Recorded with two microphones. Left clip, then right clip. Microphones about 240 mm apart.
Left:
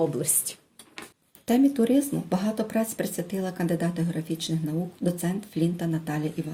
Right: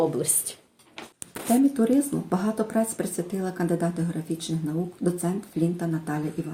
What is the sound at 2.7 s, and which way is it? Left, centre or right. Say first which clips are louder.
Speech: right 1 dB; left.